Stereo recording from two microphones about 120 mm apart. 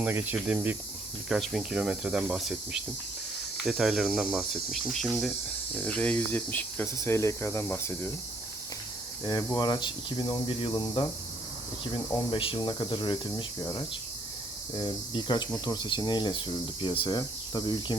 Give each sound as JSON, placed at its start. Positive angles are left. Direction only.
{"t": 0.0, "sound": "speech", "side_deg": -15}
{"t": 3.6, "sound": "speech", "side_deg": -5}
{"t": 5.7, "sound": "speech", "side_deg": 10}
{"t": 9.2, "sound": "cricket", "side_deg": 35}
{"t": 11.9, "sound": "speech", "side_deg": 45}
{"t": 12.5, "sound": "cricket", "side_deg": 40}
{"t": 13.6, "sound": "cricket", "side_deg": 30}